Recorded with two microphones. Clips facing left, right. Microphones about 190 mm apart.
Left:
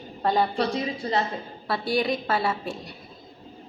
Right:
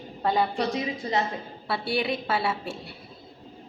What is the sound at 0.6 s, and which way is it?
Speech, 20° right (ahead or behind).